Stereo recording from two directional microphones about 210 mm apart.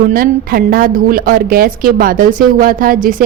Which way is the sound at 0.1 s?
45° right (ahead or behind).